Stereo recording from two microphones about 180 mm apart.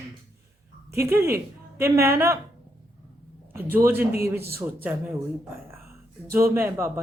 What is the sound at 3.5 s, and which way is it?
A man's voice, 15° right (ahead or behind).